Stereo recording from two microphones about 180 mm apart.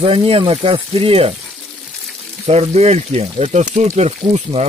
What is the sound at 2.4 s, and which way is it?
Speech, 35° right (ahead or behind).